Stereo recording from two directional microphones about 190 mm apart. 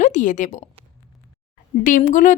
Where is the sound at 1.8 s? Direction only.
45° left (ahead or behind).